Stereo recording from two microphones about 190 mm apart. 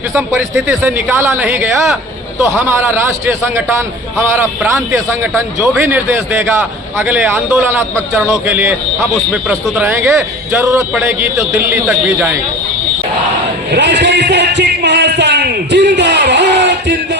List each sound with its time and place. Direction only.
0.1 s a man's voice: 15° right (ahead or behind)
7.0 s a man's voice: 10° right (ahead or behind)
10.2 s a man's voice: 15° right (ahead or behind)
13.7 s a sound: 65° right (ahead or behind)